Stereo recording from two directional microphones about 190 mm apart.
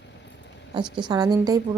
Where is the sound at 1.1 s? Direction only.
20° right (ahead or behind).